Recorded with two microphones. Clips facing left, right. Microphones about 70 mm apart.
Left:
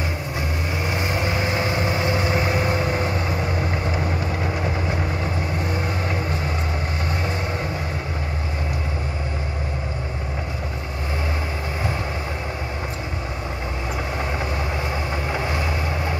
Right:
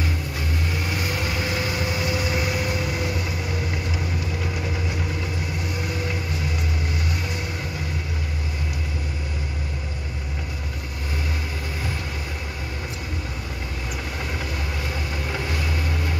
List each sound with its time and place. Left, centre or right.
0.8 s vehicle: left
15.3 s vehicle: left